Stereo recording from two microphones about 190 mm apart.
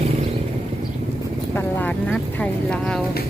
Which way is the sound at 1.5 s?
10° left (ahead or behind).